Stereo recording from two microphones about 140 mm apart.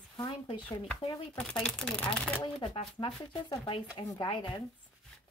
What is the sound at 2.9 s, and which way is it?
Speech, 40° left (ahead or behind).